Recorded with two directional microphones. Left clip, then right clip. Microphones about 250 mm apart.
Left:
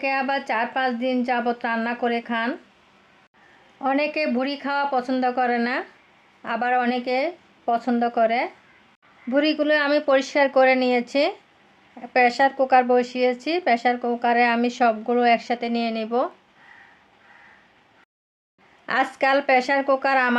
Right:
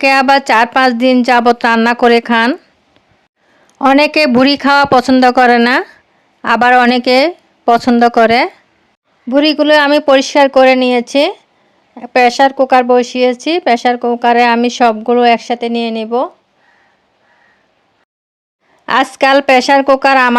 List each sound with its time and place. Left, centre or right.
0.0 s speech: right
3.8 s speech: right
18.9 s speech: right